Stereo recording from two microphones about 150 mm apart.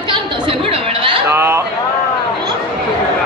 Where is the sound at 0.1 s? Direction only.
35° right (ahead or behind).